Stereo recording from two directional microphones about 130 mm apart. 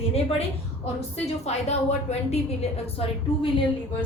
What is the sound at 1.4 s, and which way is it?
Speech, 55° left (ahead or behind).